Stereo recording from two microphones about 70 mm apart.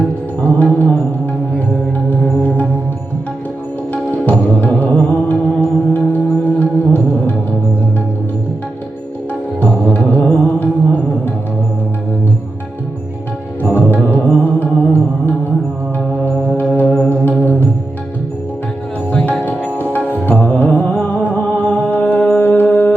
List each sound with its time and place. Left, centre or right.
0.4 s mantra: left
3.9 s music: left
9.8 s music: left
10.2 s mantra: left
13.7 s music: left
19.4 s music: left